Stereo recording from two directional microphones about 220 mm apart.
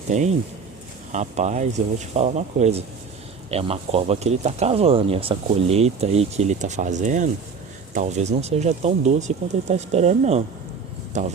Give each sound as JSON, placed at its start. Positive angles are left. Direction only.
{"t": 0.1, "sound": "speech", "side_deg": -30}